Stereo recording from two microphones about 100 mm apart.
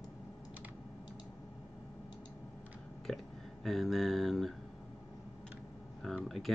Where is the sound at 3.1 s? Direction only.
5° left (ahead or behind).